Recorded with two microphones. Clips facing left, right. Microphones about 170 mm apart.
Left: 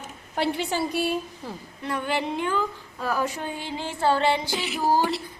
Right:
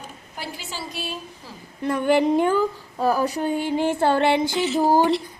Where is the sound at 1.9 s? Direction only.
45° right (ahead or behind).